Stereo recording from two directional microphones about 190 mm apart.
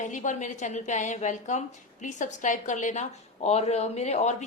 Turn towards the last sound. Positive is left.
turn(degrees=35)  # may be behind; listen again after turning